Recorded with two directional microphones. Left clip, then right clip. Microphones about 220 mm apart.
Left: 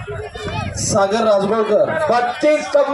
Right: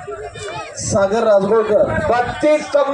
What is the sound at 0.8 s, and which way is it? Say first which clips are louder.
Speech: even; 10° left (ahead or behind).